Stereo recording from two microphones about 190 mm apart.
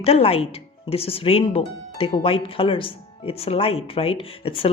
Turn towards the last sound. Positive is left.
turn(degrees=30)  # may be behind; listen again after turning